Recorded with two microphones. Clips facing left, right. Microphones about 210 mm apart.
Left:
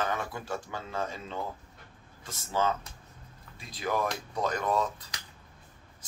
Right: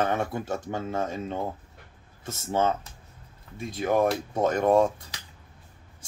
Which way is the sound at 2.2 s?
25° right (ahead or behind).